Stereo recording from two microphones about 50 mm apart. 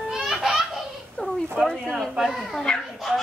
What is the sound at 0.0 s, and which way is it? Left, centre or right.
Baby laughter, centre.